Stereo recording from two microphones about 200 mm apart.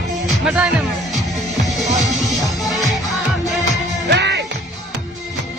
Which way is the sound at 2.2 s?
15° left (ahead or behind).